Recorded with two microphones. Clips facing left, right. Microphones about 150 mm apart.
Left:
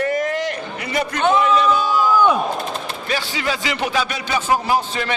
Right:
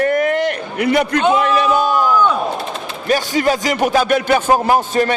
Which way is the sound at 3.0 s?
45° right (ahead or behind).